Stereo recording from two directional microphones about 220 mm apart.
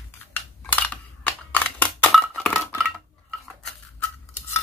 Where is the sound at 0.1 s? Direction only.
10° left (ahead or behind).